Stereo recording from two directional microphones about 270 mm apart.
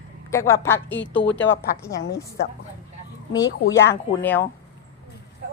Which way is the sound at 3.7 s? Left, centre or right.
Centre.